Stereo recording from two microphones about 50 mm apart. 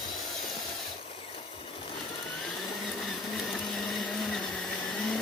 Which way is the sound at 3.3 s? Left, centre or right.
Centre.